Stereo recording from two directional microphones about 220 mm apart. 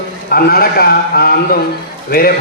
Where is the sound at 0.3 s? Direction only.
45° left (ahead or behind).